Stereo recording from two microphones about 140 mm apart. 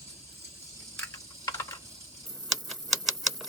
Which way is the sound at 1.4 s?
25° left (ahead or behind).